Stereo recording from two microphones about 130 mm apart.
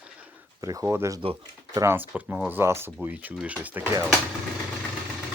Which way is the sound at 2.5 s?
20° right (ahead or behind).